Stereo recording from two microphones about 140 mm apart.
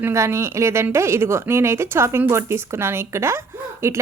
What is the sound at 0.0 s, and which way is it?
Speech, 20° right (ahead or behind).